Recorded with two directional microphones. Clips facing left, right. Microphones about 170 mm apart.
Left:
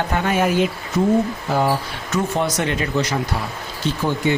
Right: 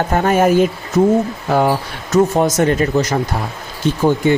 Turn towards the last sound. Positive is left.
turn(degrees=-50)  # may be behind; listen again after turning